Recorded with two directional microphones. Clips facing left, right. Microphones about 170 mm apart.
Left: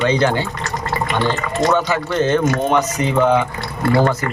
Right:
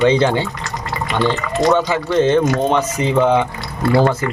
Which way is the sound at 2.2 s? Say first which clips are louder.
Right 3 dB; 25° right (ahead or behind).